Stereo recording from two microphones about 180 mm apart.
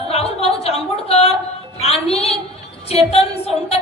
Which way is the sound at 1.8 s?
35° left (ahead or behind).